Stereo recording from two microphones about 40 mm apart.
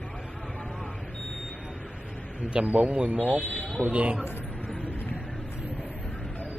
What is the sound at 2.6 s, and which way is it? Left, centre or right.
Speech, right.